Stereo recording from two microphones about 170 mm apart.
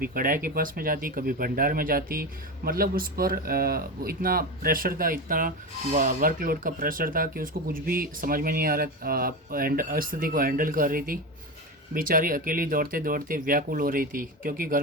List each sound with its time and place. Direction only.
0.0 s a man's voice: 55° right (ahead or behind)